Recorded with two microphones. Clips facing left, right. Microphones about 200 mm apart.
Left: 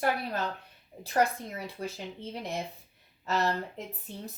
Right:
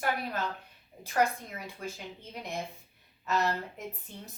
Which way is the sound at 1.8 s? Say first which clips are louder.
Left 3 dB; 35° left (ahead or behind).